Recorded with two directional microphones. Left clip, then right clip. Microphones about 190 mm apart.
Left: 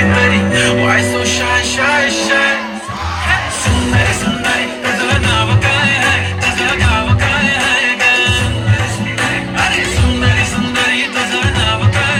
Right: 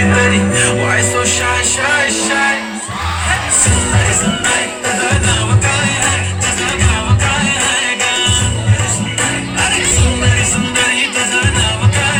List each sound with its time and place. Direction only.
0.1 s music: 20° right (ahead or behind)